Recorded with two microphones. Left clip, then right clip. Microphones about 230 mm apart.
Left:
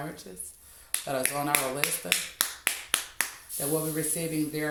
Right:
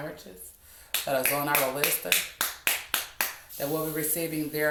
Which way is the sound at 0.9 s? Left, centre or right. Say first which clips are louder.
Right 4 dB; left.